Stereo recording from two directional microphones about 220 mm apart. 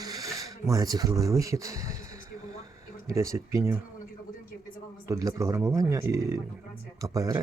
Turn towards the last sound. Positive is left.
turn(degrees=-15)  # may be behind; listen again after turning